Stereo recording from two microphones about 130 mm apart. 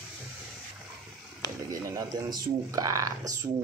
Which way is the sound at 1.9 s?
25° right (ahead or behind).